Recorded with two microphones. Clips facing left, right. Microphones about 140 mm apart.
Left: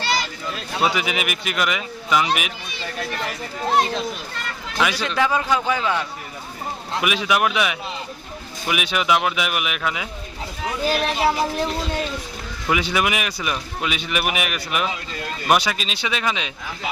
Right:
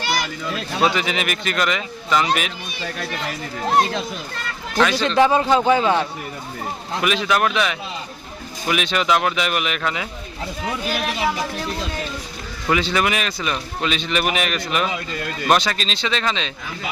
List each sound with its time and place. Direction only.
0.8 s a man's voice: 10° left (ahead or behind)
4.8 s a man's voice: 10° left (ahead or behind)
5.0 s a man's voice: 25° right (ahead or behind)
7.0 s a man's voice: 10° left (ahead or behind)
10.8 s speech: 35° left (ahead or behind)
12.6 s a man's voice: 10° left (ahead or behind)